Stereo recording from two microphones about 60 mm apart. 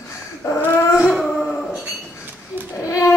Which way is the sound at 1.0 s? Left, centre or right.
Centre.